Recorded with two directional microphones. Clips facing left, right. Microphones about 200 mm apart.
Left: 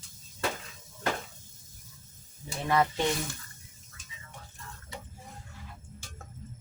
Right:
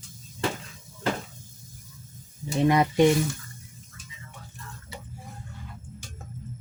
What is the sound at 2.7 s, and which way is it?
Speech, 15° right (ahead or behind).